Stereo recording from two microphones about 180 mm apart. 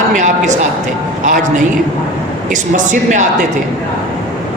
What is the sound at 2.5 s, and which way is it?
Speech, 45° right (ahead or behind).